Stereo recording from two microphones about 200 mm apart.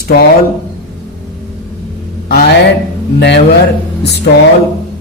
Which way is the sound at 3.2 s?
60° left (ahead or behind).